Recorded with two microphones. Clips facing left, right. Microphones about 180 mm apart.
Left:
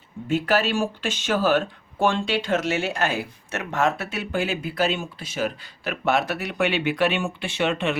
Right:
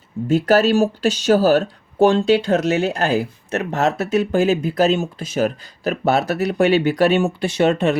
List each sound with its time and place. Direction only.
0.3 s speech: 40° right (ahead or behind)